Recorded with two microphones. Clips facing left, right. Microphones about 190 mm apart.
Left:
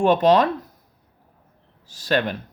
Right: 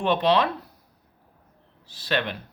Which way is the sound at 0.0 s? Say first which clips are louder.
Left 5 dB; 45° left (ahead or behind).